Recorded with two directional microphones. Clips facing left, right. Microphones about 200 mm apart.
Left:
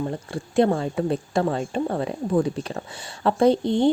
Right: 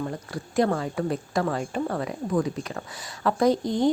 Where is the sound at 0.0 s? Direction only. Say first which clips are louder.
Left 3 dB; 25° left (ahead or behind).